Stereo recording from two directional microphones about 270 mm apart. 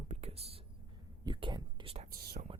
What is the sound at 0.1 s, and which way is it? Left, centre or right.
Computer keyboard, right.